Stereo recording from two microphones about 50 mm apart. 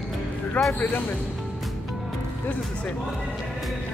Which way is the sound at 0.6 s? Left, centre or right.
Left.